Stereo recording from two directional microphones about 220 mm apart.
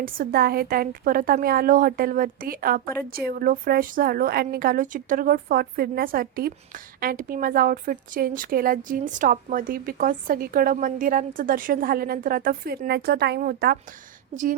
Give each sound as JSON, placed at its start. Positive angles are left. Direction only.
{"t": 0.0, "sound": "a woman's voice", "side_deg": -40}